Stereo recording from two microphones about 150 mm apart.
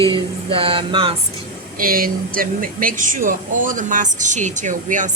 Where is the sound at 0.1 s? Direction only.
35° right (ahead or behind).